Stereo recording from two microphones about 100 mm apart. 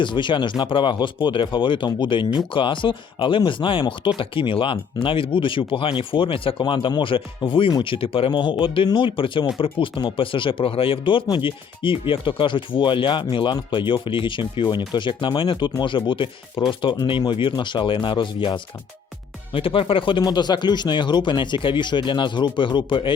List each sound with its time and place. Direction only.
0.0 s speech: 50° left (ahead or behind)
19.5 s speech: 65° left (ahead or behind)
20.2 s speech: 45° left (ahead or behind)